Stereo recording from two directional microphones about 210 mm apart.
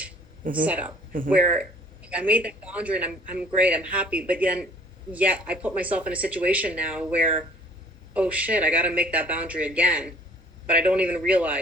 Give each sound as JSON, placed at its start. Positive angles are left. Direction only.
{"t": 0.6, "sound": "a man's voice", "side_deg": -5}
{"t": 2.0, "sound": "a man's voice", "side_deg": -5}